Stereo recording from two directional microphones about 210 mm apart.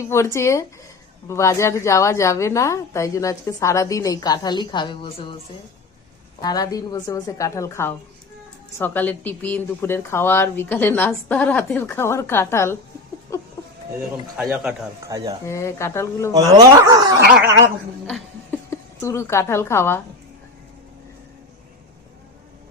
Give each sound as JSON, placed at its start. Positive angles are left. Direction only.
{"t": 0.0, "sound": "a woman's voice", "side_deg": 15}
{"t": 6.4, "sound": "a woman's voice", "side_deg": 20}
{"t": 14.4, "sound": "speech", "side_deg": -10}
{"t": 15.0, "sound": "speech", "side_deg": -15}
{"t": 15.4, "sound": "a woman's voice", "side_deg": 15}
{"t": 16.3, "sound": "speech", "side_deg": -15}
{"t": 18.0, "sound": "a woman's voice", "side_deg": 5}